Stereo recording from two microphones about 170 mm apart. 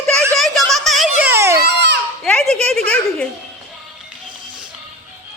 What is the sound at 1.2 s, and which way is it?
Baby cry, 15° right (ahead or behind).